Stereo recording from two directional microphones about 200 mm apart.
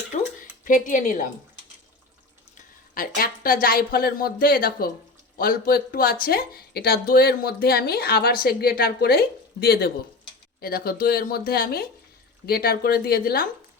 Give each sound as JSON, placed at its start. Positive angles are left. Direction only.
{"t": 0.1, "sound": "a sound", "side_deg": 35}
{"t": 0.6, "sound": "speech", "side_deg": 40}
{"t": 2.9, "sound": "speech", "side_deg": 45}